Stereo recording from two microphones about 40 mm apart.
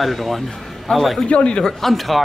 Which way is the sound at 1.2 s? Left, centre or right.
Left.